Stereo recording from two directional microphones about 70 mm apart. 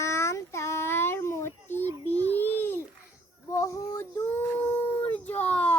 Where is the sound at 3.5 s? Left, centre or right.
Left.